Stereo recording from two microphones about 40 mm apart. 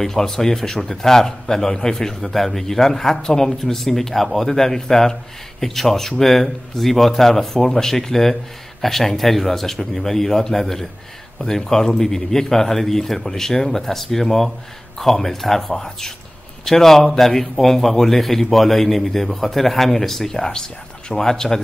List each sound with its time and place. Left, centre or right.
0.0 s a man's voice: centre
11.3 s a man's voice: centre
20.3 s a man's voice: centre